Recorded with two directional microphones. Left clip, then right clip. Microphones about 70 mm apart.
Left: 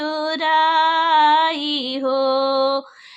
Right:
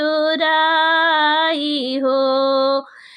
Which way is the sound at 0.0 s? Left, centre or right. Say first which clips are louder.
Right 5 dB; right.